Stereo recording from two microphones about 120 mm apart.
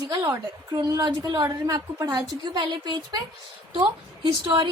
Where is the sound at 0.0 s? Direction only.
35° right (ahead or behind).